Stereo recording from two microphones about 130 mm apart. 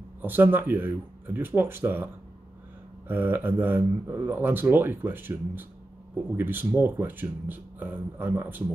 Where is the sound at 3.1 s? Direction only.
15° right (ahead or behind).